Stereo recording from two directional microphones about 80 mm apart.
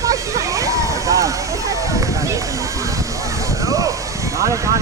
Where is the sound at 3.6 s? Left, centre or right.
Right.